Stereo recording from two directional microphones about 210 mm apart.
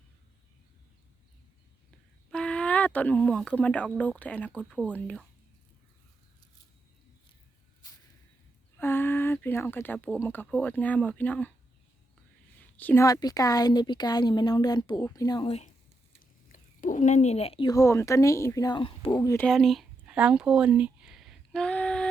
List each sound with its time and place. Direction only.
2.3 s speech: 5° left (ahead or behind)
8.8 s a sound: 10° left (ahead or behind)
10.2 s speech: 10° left (ahead or behind)
12.5 s a woman's voice: 10° left (ahead or behind); by 15.7 s 30° left (ahead or behind)
16.5 s a woman's voice: 40° left (ahead or behind); by 19.5 s 15° left (ahead or behind)
19.5 s a sound: centre (ahead or behind)